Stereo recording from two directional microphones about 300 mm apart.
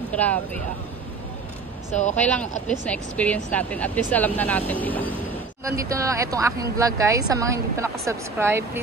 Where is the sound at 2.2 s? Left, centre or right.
Centre.